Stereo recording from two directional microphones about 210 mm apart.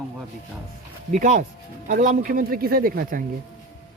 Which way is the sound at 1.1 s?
35° right (ahead or behind).